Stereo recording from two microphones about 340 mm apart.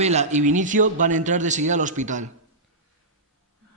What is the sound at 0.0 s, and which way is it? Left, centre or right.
A man's voice, centre.